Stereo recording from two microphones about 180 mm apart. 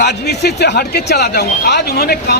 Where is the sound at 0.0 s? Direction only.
70° left (ahead or behind).